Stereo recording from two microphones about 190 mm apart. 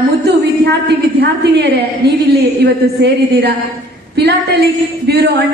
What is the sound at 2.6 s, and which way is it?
Speech, 60° right (ahead or behind).